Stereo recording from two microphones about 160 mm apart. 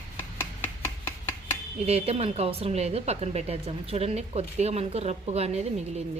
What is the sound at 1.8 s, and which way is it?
A woman's voice, 40° right (ahead or behind).